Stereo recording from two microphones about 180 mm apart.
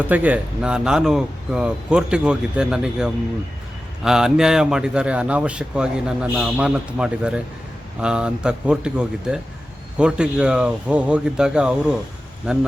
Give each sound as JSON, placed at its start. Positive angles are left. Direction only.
{"t": 0.1, "sound": "a man's voice", "side_deg": -10}